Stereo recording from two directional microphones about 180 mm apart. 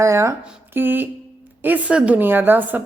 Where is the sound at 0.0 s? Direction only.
15° right (ahead or behind).